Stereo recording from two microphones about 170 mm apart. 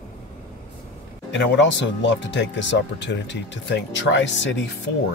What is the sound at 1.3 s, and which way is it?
Speech, 90° left.